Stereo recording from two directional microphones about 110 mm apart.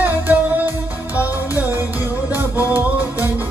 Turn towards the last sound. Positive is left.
turn(degrees=-15)  # may be behind; listen again after turning